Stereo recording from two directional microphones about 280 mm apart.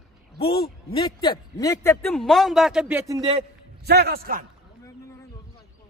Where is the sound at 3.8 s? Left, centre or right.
Right.